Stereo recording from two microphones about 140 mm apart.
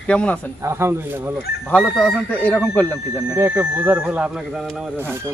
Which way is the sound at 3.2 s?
10° right (ahead or behind).